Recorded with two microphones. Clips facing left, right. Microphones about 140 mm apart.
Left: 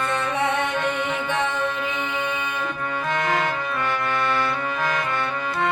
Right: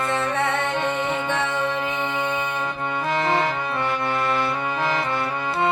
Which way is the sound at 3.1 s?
30° right (ahead or behind).